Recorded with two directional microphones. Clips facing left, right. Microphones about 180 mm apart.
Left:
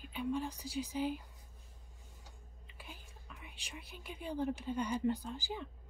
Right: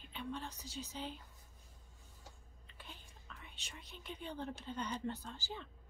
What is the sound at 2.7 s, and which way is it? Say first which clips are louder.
Speech: left 2 dB; 10° left (ahead or behind).